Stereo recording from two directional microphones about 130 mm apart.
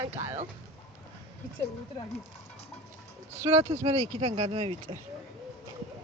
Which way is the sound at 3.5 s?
55° right (ahead or behind).